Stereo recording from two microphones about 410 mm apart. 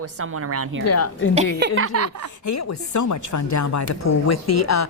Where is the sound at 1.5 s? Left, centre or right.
Right.